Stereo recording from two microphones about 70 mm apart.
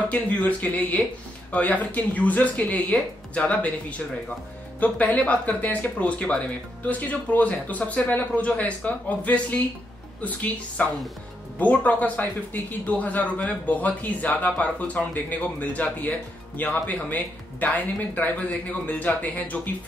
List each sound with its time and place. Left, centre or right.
0.1 s a man's voice: left
4.7 s a man's voice: left